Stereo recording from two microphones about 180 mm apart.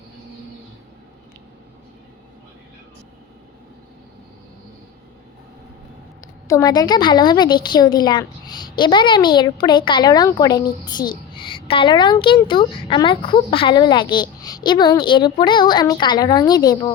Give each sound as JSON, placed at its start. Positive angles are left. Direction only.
{"t": 6.5, "sound": "a woman's voice", "side_deg": 20}